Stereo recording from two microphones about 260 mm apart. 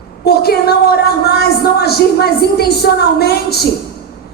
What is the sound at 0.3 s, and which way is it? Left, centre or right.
A woman's voice, left.